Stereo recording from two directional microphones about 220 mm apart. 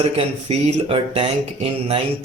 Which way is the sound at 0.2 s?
30° right (ahead or behind).